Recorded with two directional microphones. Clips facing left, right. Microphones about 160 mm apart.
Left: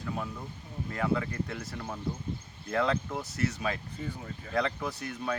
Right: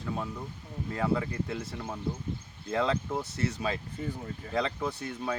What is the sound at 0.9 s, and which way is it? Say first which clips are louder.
Speech: right 1 dB; 25° right (ahead or behind).